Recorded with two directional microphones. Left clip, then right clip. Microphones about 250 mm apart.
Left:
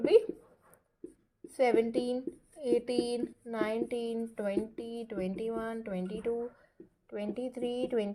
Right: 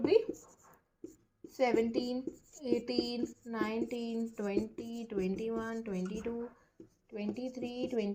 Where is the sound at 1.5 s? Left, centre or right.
Left.